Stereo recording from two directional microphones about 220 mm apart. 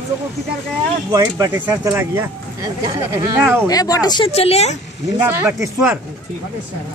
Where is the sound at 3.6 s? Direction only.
15° left (ahead or behind).